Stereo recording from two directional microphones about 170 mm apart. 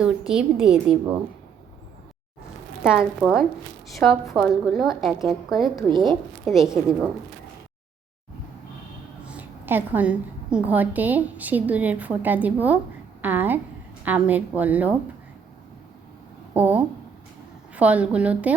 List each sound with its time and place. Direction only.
0.0 s a woman's voice: 5° right (ahead or behind)
3.0 s a woman's voice: centre (ahead or behind)
4.0 s a woman's voice: 10° left (ahead or behind)
5.9 s a woman's voice: 25° right (ahead or behind)
6.4 s a woman's voice: centre (ahead or behind)
9.2 s a woman's voice: 10° right (ahead or behind)
16.6 s a woman's voice: 10° right (ahead or behind)